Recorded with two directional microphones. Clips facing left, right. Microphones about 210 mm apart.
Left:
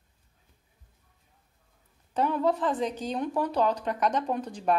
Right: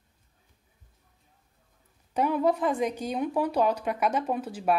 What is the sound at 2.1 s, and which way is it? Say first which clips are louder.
Speech: right 1 dB; 10° right (ahead or behind).